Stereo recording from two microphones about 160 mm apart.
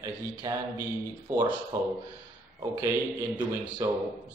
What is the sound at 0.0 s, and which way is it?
A man's voice, 20° right (ahead or behind).